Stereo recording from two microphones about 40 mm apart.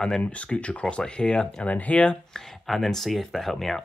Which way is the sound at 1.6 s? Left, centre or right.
Left.